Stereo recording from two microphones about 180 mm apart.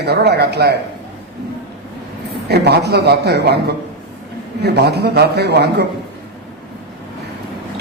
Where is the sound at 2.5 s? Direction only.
65° right (ahead or behind).